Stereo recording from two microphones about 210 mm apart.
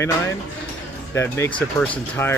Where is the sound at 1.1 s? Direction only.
10° left (ahead or behind).